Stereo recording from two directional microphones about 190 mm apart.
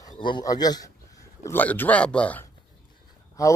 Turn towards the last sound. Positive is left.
turn(degrees=15)  # may be behind; listen again after turning